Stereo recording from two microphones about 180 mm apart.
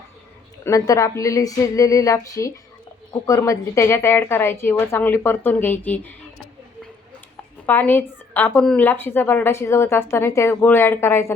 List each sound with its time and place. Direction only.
0.6 s speech: 15° left (ahead or behind)
7.7 s speech: 10° left (ahead or behind)